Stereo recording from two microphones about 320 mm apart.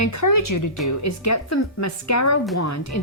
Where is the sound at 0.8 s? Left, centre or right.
Left.